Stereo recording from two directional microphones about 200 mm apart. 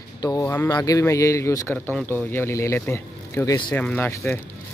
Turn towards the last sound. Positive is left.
turn(degrees=10)  # may be behind; listen again after turning